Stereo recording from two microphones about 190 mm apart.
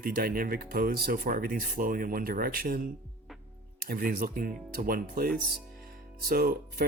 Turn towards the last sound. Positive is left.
turn(degrees=-50)  # may be behind; listen again after turning